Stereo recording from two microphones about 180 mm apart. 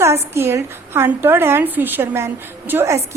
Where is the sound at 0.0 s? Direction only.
15° right (ahead or behind).